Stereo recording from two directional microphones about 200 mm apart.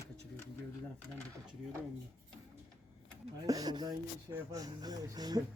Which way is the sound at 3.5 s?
20° right (ahead or behind).